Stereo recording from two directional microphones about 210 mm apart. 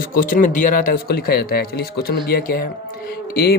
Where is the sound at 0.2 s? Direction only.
40° left (ahead or behind).